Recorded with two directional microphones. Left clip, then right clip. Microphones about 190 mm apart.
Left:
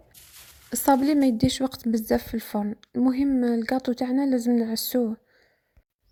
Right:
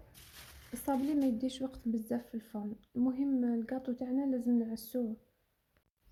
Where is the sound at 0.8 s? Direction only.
45° left (ahead or behind).